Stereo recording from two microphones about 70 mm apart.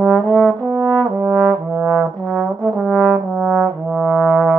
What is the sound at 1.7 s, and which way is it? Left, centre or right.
Trombone, left.